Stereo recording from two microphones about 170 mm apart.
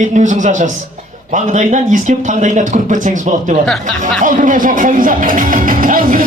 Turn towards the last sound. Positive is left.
turn(degrees=-55)  # may be behind; listen again after turning